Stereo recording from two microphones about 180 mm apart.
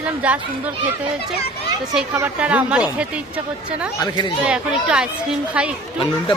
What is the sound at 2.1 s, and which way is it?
A woman's voice, 10° right (ahead or behind).